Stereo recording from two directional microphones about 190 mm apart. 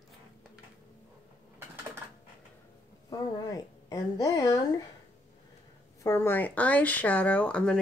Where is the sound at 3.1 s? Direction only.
20° left (ahead or behind).